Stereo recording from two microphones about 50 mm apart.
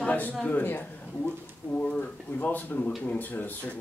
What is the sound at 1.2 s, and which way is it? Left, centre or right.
Speech, left.